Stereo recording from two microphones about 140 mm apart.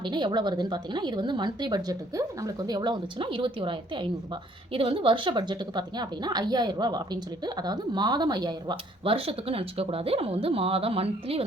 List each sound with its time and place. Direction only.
0.0 s a woman's voice: 35° right (ahead or behind)